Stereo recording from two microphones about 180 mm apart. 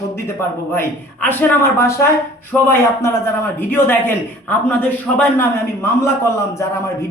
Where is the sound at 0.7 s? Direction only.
10° left (ahead or behind).